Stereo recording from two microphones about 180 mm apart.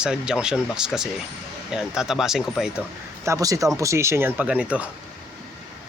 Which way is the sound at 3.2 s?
20° right (ahead or behind).